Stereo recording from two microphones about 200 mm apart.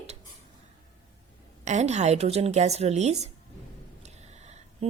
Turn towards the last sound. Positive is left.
turn(degrees=-35)  # may be behind; listen again after turning